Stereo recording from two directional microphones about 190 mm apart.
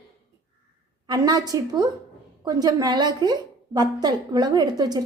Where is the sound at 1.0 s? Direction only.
20° right (ahead or behind).